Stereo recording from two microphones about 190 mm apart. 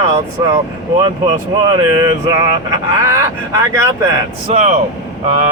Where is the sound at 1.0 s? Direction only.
20° right (ahead or behind).